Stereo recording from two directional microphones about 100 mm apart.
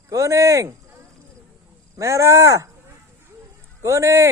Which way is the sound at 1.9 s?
30° right (ahead or behind).